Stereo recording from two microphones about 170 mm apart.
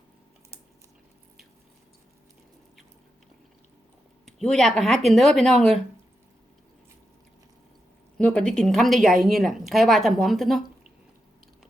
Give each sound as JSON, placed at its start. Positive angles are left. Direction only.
{"t": 4.3, "sound": "speech", "side_deg": 5}
{"t": 8.2, "sound": "speech", "side_deg": 5}